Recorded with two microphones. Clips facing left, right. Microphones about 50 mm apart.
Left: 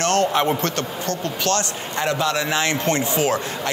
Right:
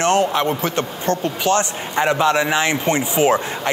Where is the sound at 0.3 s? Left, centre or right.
Centre.